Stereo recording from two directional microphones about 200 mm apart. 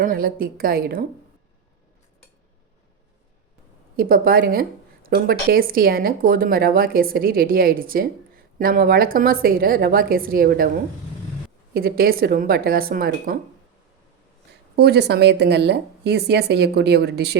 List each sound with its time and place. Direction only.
0.0 s speech: 45° right (ahead or behind)
3.9 s speech: 50° right (ahead or behind)
11.7 s speech: 50° right (ahead or behind)
14.8 s speech: 55° right (ahead or behind)